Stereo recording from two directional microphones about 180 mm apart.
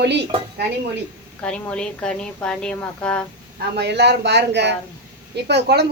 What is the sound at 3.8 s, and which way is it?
Speech, 70° right (ahead or behind).